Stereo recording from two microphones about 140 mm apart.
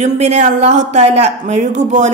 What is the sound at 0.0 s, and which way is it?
Speech, 55° right (ahead or behind).